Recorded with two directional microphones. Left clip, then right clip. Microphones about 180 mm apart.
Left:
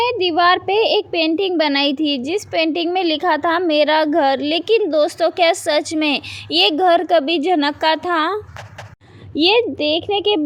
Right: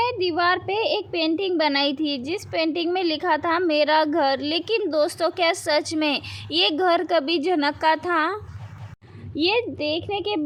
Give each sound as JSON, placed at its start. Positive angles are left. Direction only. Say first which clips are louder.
{"t": 0.0, "sound": "a child's voice", "louder": "left 6 dB", "side_deg": 30}